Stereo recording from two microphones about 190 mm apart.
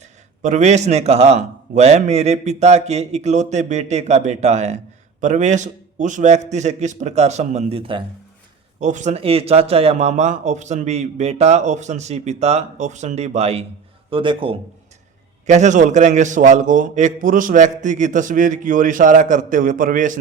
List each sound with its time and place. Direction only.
0.4 s speech: 40° right (ahead or behind)
8.8 s a man's voice: 40° right (ahead or behind)
15.4 s speech: 40° right (ahead or behind)